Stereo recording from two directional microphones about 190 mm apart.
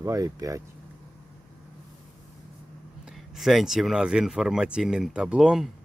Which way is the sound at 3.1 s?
Centre (ahead or behind).